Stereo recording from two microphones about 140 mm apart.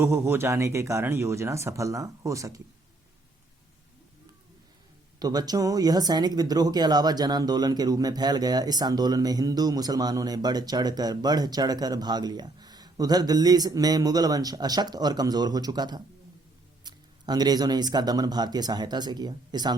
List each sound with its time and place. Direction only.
0.0 s speech: 20° right (ahead or behind)
5.2 s speech: 30° right (ahead or behind)